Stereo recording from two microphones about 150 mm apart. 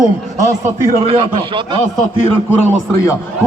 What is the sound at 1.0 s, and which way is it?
Speech, 40° right (ahead or behind).